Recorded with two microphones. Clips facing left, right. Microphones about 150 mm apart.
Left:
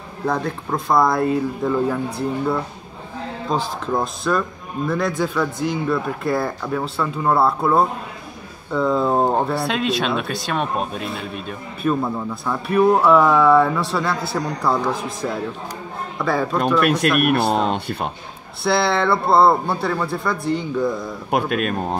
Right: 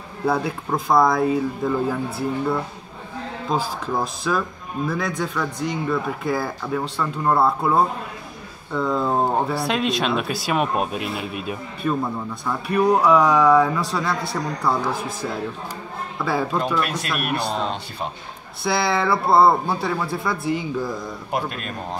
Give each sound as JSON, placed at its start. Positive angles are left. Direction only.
{"t": 0.3, "sound": "speech", "side_deg": -5}
{"t": 16.2, "sound": "speech", "side_deg": -5}
{"t": 17.2, "sound": "speech", "side_deg": 60}
{"t": 18.6, "sound": "speech", "side_deg": 0}
{"t": 21.3, "sound": "speech", "side_deg": 65}